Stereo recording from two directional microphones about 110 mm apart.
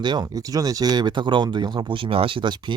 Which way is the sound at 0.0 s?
40° right (ahead or behind).